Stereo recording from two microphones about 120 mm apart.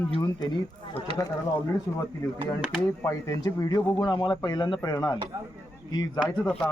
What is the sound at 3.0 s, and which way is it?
Speech, 30° left (ahead or behind).